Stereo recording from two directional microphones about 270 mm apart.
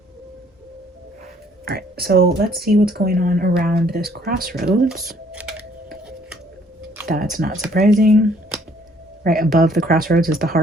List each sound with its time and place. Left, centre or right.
1.6 s speech: right
5.3 s a sound: centre
7.0 s speech: right